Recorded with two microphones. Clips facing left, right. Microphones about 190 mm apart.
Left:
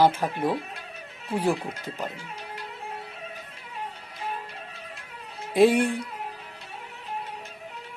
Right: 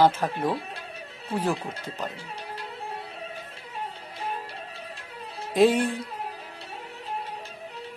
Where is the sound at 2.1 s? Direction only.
30° right (ahead or behind).